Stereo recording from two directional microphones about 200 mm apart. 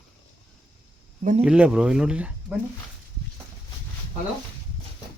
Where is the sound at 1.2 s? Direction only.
35° right (ahead or behind).